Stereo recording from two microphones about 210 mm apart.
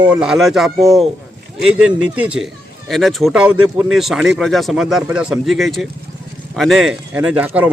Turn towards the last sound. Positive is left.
turn(degrees=-10)  # may be behind; listen again after turning